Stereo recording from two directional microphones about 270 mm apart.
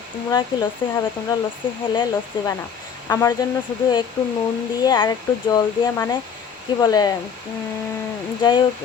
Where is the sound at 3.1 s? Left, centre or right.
Centre.